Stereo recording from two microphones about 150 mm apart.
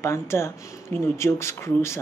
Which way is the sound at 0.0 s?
20° left (ahead or behind).